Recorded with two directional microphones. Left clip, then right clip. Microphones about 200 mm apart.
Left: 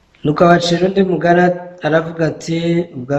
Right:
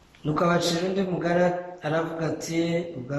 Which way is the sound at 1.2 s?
45° left (ahead or behind).